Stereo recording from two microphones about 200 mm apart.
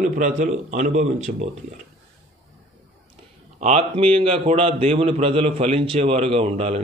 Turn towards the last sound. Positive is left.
turn(degrees=-30)  # may be behind; listen again after turning